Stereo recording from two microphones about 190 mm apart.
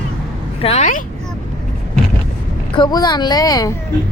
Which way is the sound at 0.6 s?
35° left (ahead or behind).